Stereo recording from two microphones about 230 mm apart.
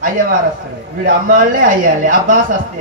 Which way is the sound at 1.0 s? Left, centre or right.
Right.